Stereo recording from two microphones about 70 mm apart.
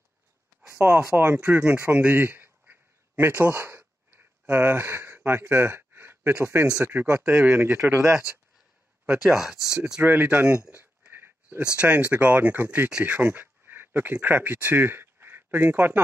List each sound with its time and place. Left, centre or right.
0.7 s a sound: right
1.1 s speech: right
7.9 s speech: right
9.2 s speech: centre
10.0 s speech: right
10.7 s a sound: right
11.7 s speech: centre